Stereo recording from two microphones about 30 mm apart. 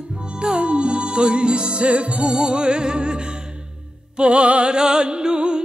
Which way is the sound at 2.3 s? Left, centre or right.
Right.